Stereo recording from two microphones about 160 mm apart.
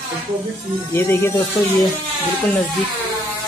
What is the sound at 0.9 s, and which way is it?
Speech, 15° left (ahead or behind).